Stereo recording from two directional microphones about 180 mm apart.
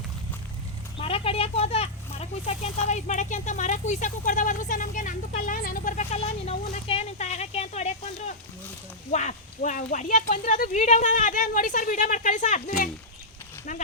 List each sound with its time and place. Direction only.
0.9 s speech: 30° left (ahead or behind)